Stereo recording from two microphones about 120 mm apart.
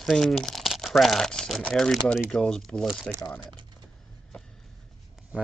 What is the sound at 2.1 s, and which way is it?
Speech, 5° left (ahead or behind).